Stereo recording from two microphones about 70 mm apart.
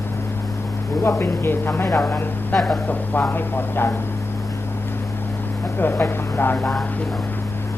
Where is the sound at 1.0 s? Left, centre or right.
Left.